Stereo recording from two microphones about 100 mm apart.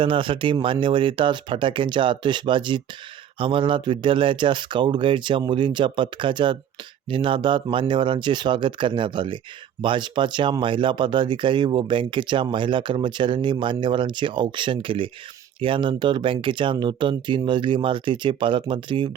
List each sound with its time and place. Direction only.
0.0 s speech: 60° right (ahead or behind)